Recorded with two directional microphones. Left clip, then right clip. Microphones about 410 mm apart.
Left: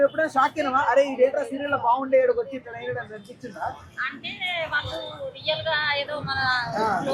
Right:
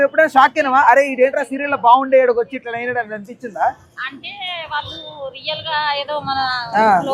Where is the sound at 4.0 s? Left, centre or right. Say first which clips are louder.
Right 2 dB; right.